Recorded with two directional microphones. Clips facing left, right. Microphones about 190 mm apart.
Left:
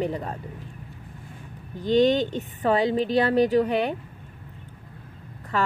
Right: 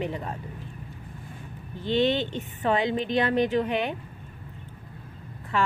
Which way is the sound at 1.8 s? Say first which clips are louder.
Left 4 dB; 40° left (ahead or behind).